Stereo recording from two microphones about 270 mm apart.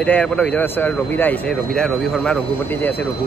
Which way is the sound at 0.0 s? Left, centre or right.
Centre.